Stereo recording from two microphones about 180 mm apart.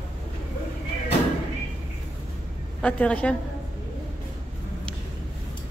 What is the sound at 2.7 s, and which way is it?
Speech, 5° left (ahead or behind).